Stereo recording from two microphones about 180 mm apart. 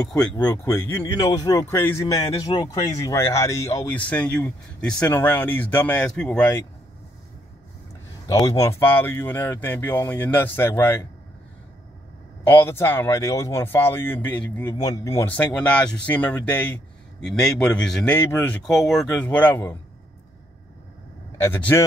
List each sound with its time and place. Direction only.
0.2 s speech: 10° left (ahead or behind)
4.0 s speech: 5° left (ahead or behind)
8.3 s speech: 20° left (ahead or behind)
12.4 s speech: 15° left (ahead or behind)
14.7 s speech: 20° left (ahead or behind)
21.4 s speech: 10° left (ahead or behind)